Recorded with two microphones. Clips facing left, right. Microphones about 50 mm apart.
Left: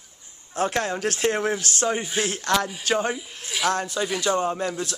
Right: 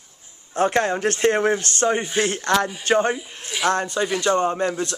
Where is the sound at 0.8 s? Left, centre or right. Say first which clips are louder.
Right 5 dB; centre.